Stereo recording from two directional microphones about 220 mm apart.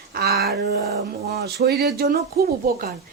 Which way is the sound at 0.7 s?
45° right (ahead or behind).